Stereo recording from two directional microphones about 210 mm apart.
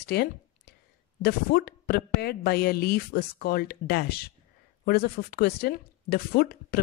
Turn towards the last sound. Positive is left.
turn(degrees=45)  # may be behind; listen again after turning